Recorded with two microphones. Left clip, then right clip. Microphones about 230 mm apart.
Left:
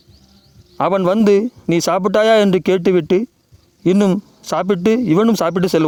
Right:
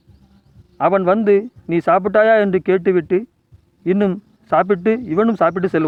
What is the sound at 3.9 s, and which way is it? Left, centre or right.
Speech, left.